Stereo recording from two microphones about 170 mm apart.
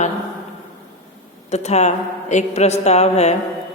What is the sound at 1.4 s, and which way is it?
A woman's voice, 40° left (ahead or behind).